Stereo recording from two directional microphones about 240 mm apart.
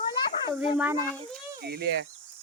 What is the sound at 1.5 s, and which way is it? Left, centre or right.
Speech, right.